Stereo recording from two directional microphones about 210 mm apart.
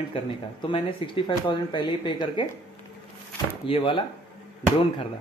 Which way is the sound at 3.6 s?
25° left (ahead or behind).